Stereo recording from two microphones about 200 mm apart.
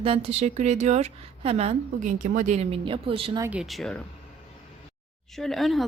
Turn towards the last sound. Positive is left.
turn(degrees=0)  # may be behind; listen again after turning